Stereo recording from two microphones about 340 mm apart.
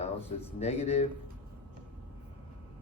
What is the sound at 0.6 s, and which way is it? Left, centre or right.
Speech, centre.